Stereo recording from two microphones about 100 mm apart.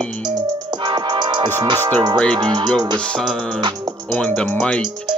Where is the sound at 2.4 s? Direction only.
50° right (ahead or behind).